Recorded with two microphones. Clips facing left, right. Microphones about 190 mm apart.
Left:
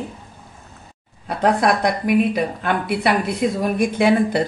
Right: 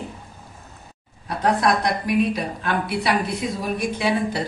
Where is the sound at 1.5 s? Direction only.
55° left (ahead or behind).